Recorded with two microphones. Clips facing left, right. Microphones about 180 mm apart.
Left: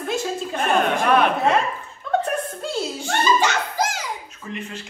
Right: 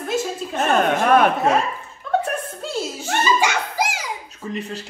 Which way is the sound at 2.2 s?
Centre (ahead or behind).